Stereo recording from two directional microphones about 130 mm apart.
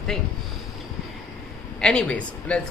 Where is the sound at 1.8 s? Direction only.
5° left (ahead or behind).